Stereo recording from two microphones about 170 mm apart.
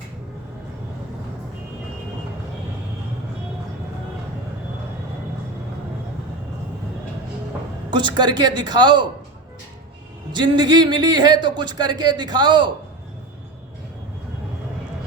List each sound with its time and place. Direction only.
7.9 s speech: 25° right (ahead or behind)
10.3 s speech: 25° right (ahead or behind)